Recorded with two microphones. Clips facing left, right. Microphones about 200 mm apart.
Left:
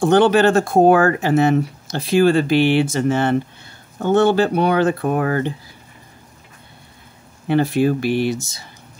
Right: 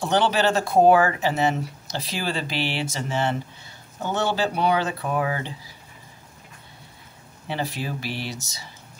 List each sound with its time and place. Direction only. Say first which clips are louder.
0.0 s speech: left 8 dB; 50° left (ahead or behind)
7.4 s speech: left 13 dB; 55° left (ahead or behind)